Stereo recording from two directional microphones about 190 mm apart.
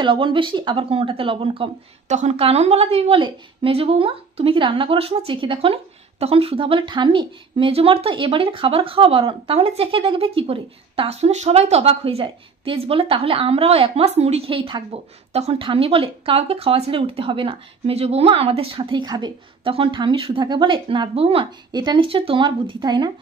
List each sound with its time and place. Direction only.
0.0 s speech: 25° right (ahead or behind)